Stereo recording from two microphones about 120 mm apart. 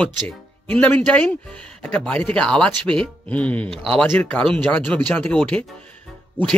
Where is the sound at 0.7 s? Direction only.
15° left (ahead or behind).